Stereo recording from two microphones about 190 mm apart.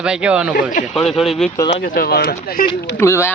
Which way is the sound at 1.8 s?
55° left (ahead or behind).